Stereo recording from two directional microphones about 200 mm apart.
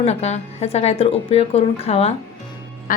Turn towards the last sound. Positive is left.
turn(degrees=40)  # may be behind; listen again after turning